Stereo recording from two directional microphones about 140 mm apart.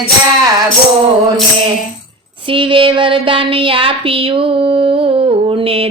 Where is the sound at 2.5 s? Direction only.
40° right (ahead or behind).